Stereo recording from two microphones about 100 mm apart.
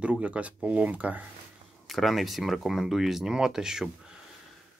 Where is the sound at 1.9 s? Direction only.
Centre (ahead or behind).